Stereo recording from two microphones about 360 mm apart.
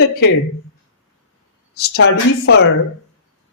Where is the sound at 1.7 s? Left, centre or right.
Left.